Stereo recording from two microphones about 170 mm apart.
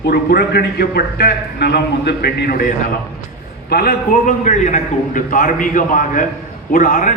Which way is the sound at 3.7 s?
65° left (ahead or behind).